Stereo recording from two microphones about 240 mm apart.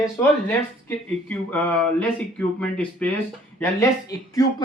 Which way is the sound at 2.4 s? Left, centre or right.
Centre.